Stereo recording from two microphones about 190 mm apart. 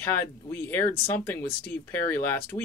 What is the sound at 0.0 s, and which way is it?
Speech, 10° left (ahead or behind).